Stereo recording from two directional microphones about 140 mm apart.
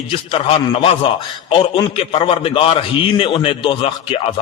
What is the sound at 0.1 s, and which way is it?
A man's voice, 40° left (ahead or behind).